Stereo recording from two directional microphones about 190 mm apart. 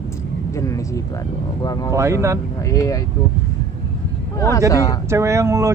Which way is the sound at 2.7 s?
15° left (ahead or behind).